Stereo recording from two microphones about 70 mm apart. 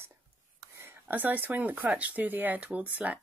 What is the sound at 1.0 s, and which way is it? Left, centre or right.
Speech, right.